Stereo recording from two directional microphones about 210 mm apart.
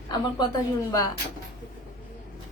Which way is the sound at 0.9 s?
15° left (ahead or behind).